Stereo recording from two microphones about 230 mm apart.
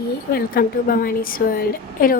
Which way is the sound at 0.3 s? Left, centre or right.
Left.